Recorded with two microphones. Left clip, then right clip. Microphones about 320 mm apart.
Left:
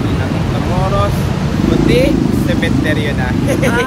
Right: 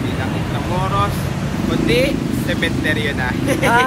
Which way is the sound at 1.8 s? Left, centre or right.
Centre.